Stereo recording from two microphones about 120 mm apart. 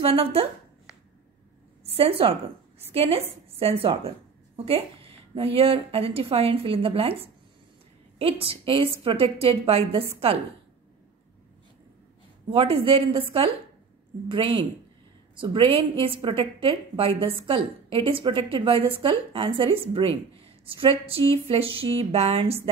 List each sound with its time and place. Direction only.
0.0 s a woman's voice: 55° right (ahead or behind)
1.8 s a woman's voice: 55° right (ahead or behind)
12.4 s a woman's voice: 55° right (ahead or behind)